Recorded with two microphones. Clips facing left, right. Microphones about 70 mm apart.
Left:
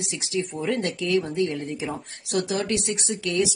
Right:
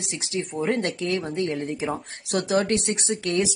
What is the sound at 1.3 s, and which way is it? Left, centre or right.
Speech, right.